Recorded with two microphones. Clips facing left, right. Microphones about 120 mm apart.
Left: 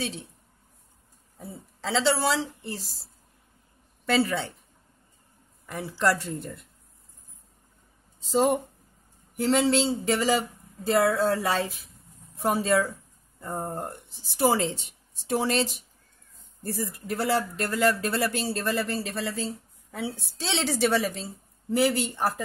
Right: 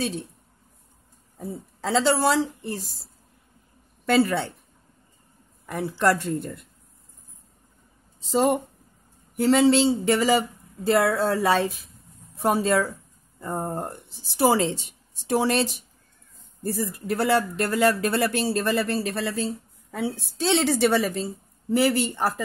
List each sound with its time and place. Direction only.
1.4 s a woman's voice: 45° right (ahead or behind)
4.0 s speech: 55° right (ahead or behind)
5.7 s speech: 60° right (ahead or behind)
8.2 s speech: 90° right
9.4 s speech: 80° right
13.4 s a woman's voice: 85° right
15.2 s speech: 70° right (ahead or behind)